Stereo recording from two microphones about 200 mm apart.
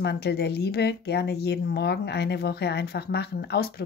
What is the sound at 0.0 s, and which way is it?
Speech, 55° left (ahead or behind).